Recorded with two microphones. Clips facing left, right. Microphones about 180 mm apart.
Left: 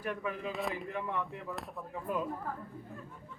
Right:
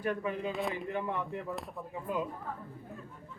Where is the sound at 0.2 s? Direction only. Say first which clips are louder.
Right 3 dB; 30° right (ahead or behind).